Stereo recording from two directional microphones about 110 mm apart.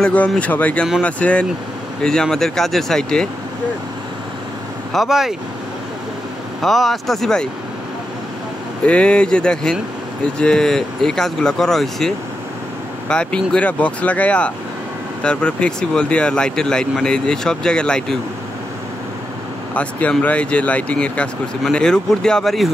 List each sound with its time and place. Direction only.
0.0 s speech: 15° left (ahead or behind)
4.9 s speech: 5° right (ahead or behind)
6.6 s speech: centre (ahead or behind)
8.8 s speech: 10° left (ahead or behind)
13.1 s speech: 10° left (ahead or behind)
19.7 s speech: 10° left (ahead or behind)